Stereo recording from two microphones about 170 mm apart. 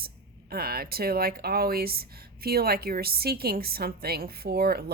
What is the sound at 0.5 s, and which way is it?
Speech, 65° right (ahead or behind).